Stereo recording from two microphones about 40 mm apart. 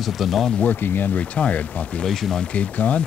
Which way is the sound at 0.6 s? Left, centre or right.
Left.